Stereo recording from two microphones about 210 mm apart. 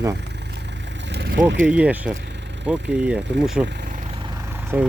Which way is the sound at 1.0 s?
55° right (ahead or behind).